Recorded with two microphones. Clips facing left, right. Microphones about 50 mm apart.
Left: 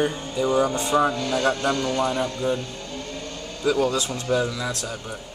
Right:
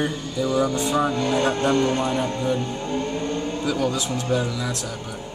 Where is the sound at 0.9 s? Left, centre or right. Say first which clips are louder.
Left 1 dB; centre.